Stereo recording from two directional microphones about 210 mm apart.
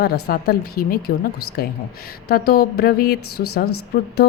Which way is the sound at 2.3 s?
45° left (ahead or behind).